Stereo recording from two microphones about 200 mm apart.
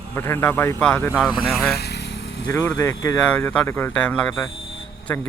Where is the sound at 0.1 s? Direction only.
10° left (ahead or behind).